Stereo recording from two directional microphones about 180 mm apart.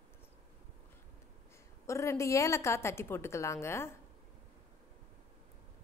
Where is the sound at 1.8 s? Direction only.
15° left (ahead or behind).